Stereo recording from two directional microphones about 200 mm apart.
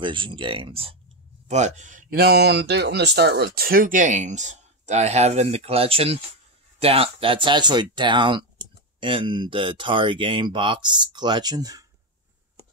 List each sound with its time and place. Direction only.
0.0 s speech: 25° right (ahead or behind)